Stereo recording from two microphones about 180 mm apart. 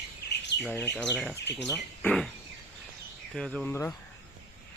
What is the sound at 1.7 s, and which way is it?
Speech, 5° left (ahead or behind).